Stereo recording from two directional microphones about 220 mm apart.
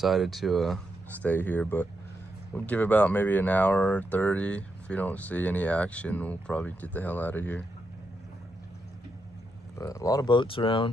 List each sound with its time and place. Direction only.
0.0 s speech: centre (ahead or behind)
9.8 s speech: 15° left (ahead or behind)